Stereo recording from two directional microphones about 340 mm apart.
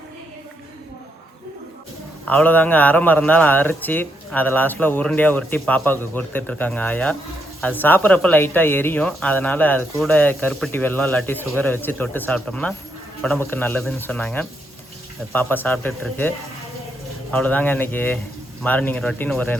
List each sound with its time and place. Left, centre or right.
2.2 s speech: centre
17.3 s speech: centre